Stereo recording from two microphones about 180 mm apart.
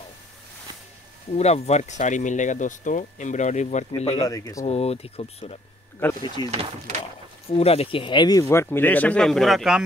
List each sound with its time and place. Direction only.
1.3 s speech: 35° left (ahead or behind)
4.2 s speech: 20° left (ahead or behind)
4.6 s speech: 35° left (ahead or behind)
6.5 s speech: 35° right (ahead or behind)
7.5 s speech: 35° left (ahead or behind); by 9.8 s centre (ahead or behind)